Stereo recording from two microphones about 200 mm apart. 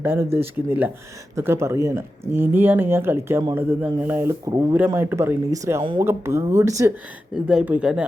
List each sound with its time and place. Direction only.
0.0 s speech: 10° right (ahead or behind)
1.4 s speech: 15° right (ahead or behind)
5.8 s speech: 25° right (ahead or behind)
6.1 s speech: 15° right (ahead or behind)